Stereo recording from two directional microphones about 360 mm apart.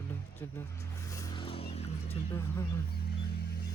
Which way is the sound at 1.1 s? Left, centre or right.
Centre.